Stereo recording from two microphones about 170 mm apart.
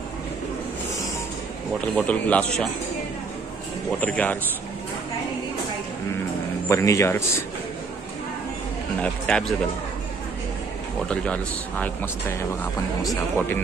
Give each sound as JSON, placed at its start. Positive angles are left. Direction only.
{"t": 2.0, "sound": "a man's voice", "side_deg": 10}
{"t": 4.0, "sound": "a man's voice", "side_deg": 10}
{"t": 6.7, "sound": "a man's voice", "side_deg": 15}
{"t": 9.0, "sound": "speech", "side_deg": 5}
{"t": 11.8, "sound": "a man's voice", "side_deg": 15}